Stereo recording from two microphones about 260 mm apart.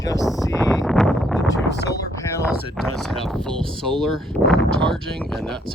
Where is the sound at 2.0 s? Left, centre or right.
Centre.